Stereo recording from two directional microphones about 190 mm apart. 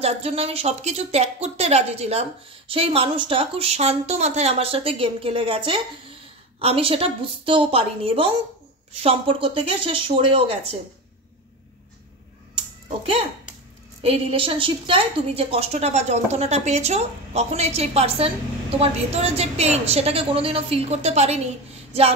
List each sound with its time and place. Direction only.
0.0 s a woman's voice: 30° right (ahead or behind)
12.5 s a sound: 30° right (ahead or behind)
14.0 s a woman's voice: 30° right (ahead or behind)